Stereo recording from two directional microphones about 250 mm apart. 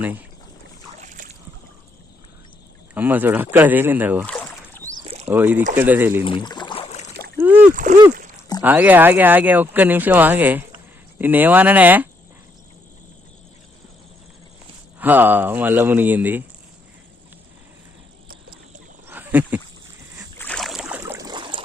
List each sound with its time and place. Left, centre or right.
1.0 s boat: right
2.9 s speech: centre
4.3 s a sound: centre
5.0 s rowboat: right
5.3 s speech: centre
6.2 s a sound: centre
7.3 s splash: centre
7.7 s speech: right
8.6 s speech: centre
14.9 s speech: centre
19.0 s a sound: centre
20.4 s boat: centre